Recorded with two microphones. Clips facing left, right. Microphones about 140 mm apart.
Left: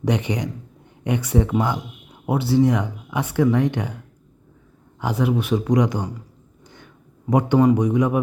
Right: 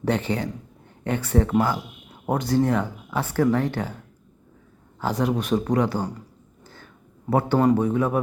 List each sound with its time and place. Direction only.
0.0 s speech: 15° left (ahead or behind)
4.9 s speech: 10° left (ahead or behind)
7.3 s speech: 15° left (ahead or behind)